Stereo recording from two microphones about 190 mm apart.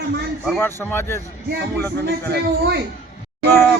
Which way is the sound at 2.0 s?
60° right (ahead or behind).